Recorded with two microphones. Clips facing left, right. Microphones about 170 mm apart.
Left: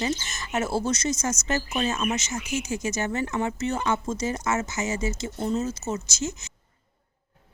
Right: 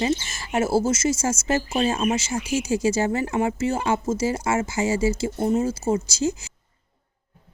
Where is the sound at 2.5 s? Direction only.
10° right (ahead or behind).